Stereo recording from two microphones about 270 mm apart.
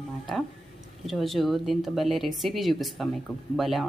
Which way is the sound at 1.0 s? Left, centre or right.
Centre.